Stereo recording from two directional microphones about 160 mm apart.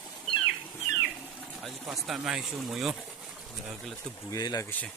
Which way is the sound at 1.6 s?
Centre (ahead or behind).